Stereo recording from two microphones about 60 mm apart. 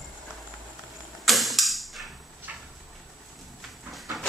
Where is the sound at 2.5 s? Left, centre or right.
Right.